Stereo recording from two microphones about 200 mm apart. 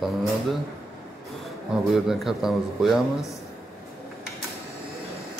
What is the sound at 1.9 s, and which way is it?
A man's voice, centre (ahead or behind).